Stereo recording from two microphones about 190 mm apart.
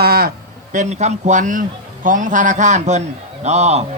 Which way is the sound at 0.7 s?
40° right (ahead or behind).